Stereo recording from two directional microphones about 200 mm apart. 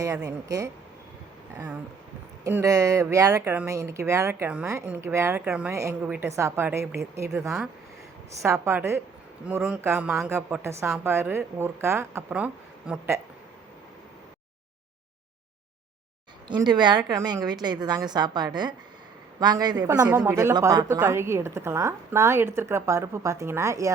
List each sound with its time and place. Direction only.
0.0 s speech: 15° right (ahead or behind)
1.5 s speech: 5° right (ahead or behind)
16.5 s a woman's voice: 20° right (ahead or behind)